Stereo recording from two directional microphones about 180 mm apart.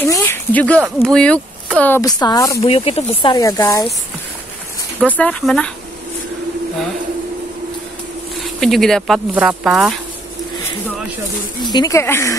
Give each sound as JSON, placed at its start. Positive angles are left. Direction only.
{"t": 0.0, "sound": "speech", "side_deg": 15}
{"t": 2.6, "sound": "speech", "side_deg": 30}
{"t": 3.3, "sound": "speech", "side_deg": 20}
{"t": 5.0, "sound": "speech", "side_deg": 5}
{"t": 8.5, "sound": "speech", "side_deg": 0}
{"t": 11.6, "sound": "speech", "side_deg": 20}